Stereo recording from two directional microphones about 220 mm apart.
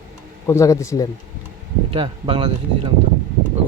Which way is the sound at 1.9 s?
25° right (ahead or behind).